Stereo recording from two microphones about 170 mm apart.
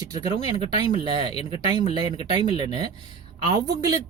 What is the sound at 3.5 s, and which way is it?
Speech, 20° right (ahead or behind).